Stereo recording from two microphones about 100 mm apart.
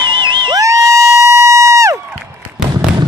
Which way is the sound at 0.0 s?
55° right (ahead or behind).